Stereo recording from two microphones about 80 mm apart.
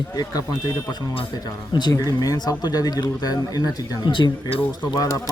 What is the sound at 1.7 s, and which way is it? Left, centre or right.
Speech, left.